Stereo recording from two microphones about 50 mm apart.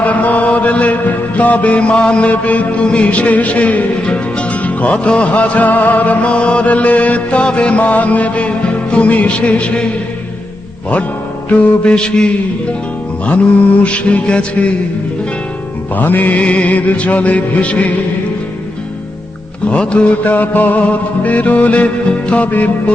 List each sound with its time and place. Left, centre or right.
0.0 s mantra: left
11.4 s mantra: left
13.8 s mantra: left
16.0 s music: left
16.4 s mantra: left
19.6 s mantra: left
21.2 s music: left